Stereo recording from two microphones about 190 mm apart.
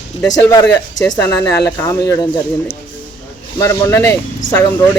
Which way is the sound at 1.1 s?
15° left (ahead or behind).